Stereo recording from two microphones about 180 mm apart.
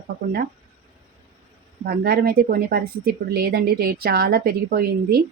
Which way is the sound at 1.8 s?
60° right (ahead or behind).